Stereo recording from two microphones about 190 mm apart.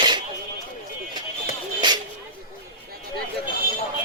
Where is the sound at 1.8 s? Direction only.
25° right (ahead or behind).